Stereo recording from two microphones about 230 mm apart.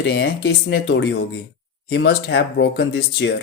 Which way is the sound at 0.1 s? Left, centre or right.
Left.